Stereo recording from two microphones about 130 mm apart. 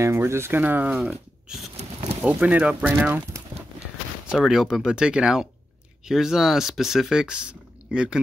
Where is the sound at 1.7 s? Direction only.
55° right (ahead or behind).